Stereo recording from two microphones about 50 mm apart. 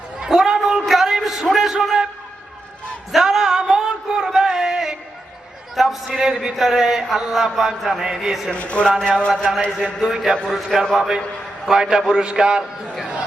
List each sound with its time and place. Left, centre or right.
0.3 s a sound: centre
3.1 s a sound: centre
6.2 s mantra: centre
8.5 s speech: left
10.0 s mantra: centre
10.4 s a man's voice: centre
10.9 s mantra: centre